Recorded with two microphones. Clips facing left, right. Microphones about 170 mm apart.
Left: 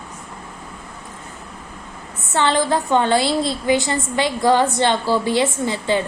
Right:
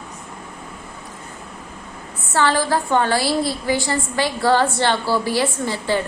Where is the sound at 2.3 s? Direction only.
20° left (ahead or behind).